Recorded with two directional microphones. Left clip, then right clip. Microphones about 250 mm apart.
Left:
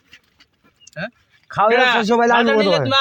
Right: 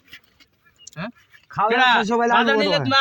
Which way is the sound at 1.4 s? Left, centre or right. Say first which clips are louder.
Left 5 dB; left.